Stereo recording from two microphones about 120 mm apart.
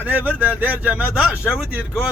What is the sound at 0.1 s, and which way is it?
Speech, 15° right (ahead or behind).